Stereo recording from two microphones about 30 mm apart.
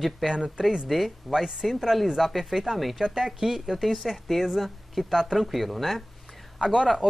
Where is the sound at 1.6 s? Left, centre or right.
Centre.